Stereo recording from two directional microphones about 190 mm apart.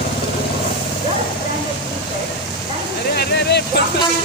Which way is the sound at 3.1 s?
60° left (ahead or behind).